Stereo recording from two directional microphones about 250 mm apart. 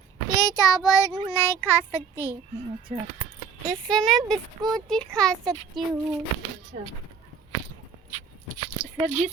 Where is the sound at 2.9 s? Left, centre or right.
Right.